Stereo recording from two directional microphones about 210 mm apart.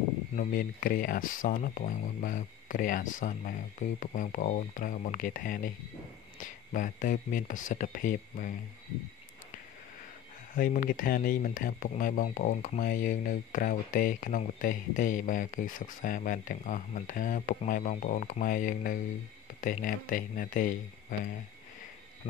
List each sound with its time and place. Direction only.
0.4 s speech: 40° left (ahead or behind)
10.5 s speech: 40° left (ahead or behind)
22.2 s speech: 35° left (ahead or behind)